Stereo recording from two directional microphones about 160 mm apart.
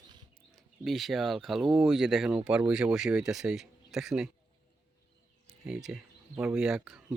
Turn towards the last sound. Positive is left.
turn(degrees=-5)  # may be behind; listen again after turning